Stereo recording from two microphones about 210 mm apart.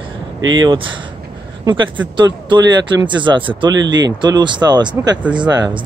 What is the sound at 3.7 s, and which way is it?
Speech, 60° right (ahead or behind).